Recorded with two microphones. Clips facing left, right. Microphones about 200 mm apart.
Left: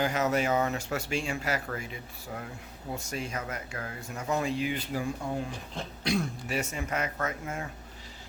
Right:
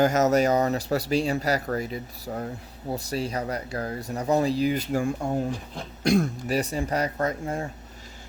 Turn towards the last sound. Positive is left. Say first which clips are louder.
# right 7 dB
turn(degrees=-35)  # may be behind; listen again after turning